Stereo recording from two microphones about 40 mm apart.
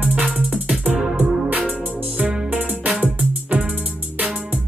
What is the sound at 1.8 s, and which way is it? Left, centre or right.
Music, right.